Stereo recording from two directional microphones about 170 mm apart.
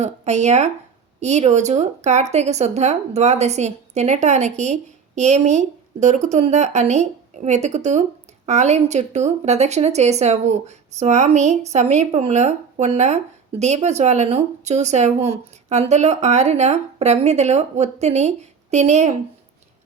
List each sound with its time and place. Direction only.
0.0 s speech: 40° right (ahead or behind)